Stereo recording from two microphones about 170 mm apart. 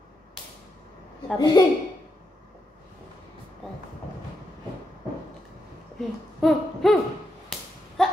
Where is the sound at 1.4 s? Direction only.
25° left (ahead or behind).